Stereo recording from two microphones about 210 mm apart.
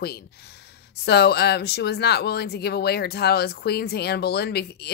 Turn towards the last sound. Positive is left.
turn(degrees=50)  # may be behind; listen again after turning